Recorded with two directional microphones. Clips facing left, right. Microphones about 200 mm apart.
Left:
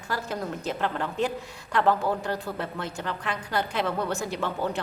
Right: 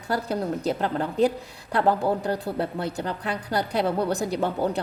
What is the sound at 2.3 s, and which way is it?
A woman's voice, 35° right (ahead or behind).